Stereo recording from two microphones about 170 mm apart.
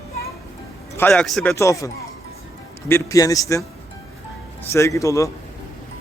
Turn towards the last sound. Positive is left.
turn(degrees=20)  # may be behind; listen again after turning